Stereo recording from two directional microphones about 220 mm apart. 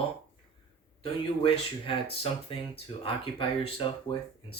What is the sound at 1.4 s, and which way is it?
Speech, 25° left (ahead or behind).